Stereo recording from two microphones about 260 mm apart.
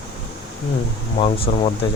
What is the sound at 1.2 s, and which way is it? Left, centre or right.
Speech, left.